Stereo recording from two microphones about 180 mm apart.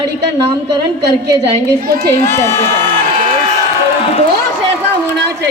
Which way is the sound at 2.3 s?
15° left (ahead or behind).